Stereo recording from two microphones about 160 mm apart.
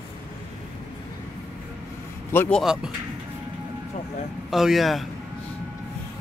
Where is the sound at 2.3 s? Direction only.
15° left (ahead or behind).